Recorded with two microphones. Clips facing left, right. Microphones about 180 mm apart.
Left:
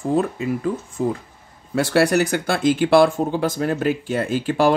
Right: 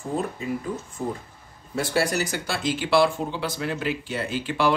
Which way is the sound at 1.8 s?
65° left (ahead or behind).